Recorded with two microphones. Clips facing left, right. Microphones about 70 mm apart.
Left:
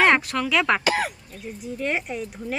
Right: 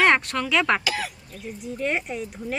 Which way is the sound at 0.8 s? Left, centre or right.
Left.